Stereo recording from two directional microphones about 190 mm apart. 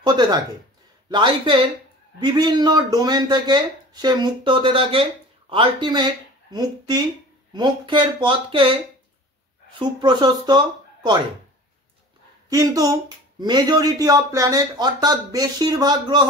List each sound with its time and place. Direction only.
0.0 s speech: 20° right (ahead or behind)
12.4 s speech: 20° right (ahead or behind)